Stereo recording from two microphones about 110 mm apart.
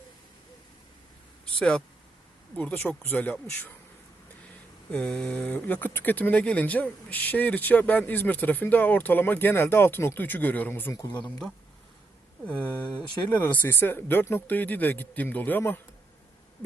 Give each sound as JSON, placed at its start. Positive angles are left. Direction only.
{"t": 1.5, "sound": "speech", "side_deg": 10}
{"t": 4.9, "sound": "mantra", "side_deg": 5}
{"t": 5.5, "sound": "speech", "side_deg": 15}